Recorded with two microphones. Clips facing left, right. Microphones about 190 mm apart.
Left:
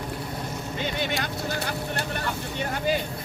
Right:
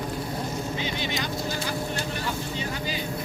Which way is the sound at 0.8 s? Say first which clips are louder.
Left 1 dB; 60° left (ahead or behind).